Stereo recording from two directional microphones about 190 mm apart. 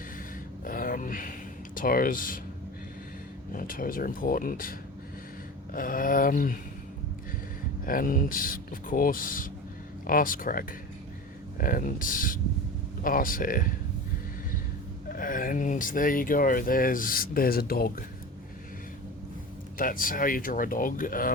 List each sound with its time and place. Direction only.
0.6 s a sound: 45° left (ahead or behind)
3.5 s speech: 45° left (ahead or behind)
5.7 s speech: 45° left (ahead or behind)
7.9 s speech: 45° left (ahead or behind)
15.1 s speech: 45° left (ahead or behind)
19.8 s speech: 45° left (ahead or behind)